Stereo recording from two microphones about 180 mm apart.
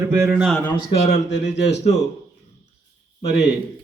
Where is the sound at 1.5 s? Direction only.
70° left (ahead or behind).